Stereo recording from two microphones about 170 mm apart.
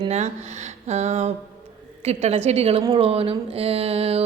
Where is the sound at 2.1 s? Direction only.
40° right (ahead or behind).